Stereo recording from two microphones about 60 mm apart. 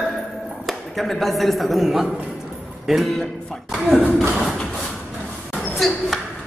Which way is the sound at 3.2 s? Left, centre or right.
Centre.